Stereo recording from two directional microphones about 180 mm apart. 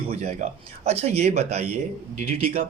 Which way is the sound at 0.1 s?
40° right (ahead or behind).